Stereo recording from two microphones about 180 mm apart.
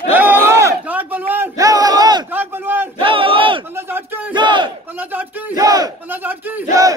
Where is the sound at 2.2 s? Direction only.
10° right (ahead or behind).